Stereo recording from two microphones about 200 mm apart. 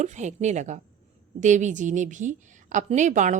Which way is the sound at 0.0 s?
35° right (ahead or behind).